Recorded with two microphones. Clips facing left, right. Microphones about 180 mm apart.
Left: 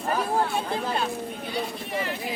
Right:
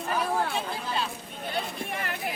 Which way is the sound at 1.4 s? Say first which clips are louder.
Right 4 dB; 55° right (ahead or behind).